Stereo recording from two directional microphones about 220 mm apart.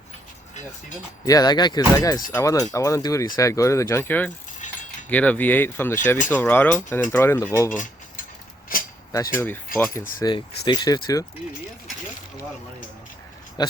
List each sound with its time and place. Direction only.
1.2 s speech: 15° left (ahead or behind)
4.6 s keys jangling: 35° left (ahead or behind)
5.0 s speech: 5° left (ahead or behind)
7.7 s a sound: 35° left (ahead or behind)
9.1 s speech: 15° left (ahead or behind)
13.6 s speech: 20° left (ahead or behind)